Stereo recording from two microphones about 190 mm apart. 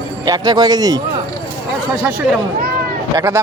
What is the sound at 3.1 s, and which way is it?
Speech, 15° right (ahead or behind).